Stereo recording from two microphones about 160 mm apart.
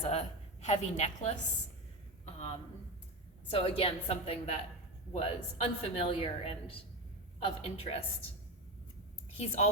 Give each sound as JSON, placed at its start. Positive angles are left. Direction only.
{"t": 0.1, "sound": "a sound", "side_deg": 45}
{"t": 3.5, "sound": "a woman's voice", "side_deg": 35}
{"t": 9.4, "sound": "a woman's voice", "side_deg": 40}